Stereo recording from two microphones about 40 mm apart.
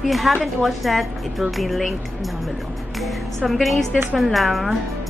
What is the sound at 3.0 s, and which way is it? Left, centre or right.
A woman's voice, centre.